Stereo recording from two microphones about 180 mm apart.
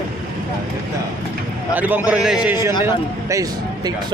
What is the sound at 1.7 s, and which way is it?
A man's voice, 10° right (ahead or behind).